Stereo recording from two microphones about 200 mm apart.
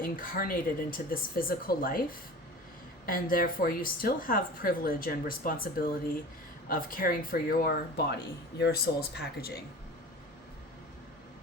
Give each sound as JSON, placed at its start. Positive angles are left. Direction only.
{"t": 0.0, "sound": "speech", "side_deg": 45}
{"t": 3.1, "sound": "speech", "side_deg": 45}